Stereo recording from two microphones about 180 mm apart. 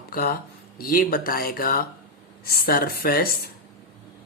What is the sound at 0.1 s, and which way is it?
Speech, 55° left (ahead or behind).